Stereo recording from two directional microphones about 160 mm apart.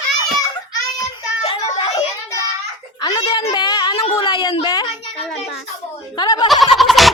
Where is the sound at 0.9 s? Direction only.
30° left (ahead or behind).